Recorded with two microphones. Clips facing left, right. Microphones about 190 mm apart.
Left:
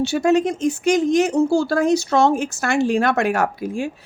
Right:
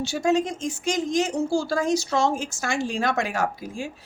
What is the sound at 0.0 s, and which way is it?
Speech, 65° left (ahead or behind).